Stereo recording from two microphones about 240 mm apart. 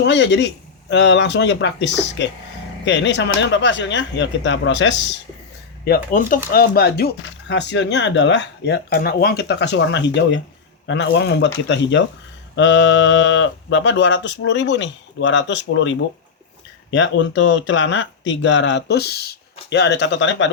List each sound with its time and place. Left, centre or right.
0.0 s speech: left
5.8 s speech: left